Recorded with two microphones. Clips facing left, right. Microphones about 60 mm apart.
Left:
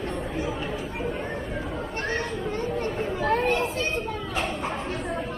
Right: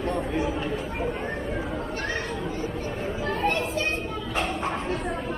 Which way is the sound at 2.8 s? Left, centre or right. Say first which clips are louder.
Left 3 dB; left.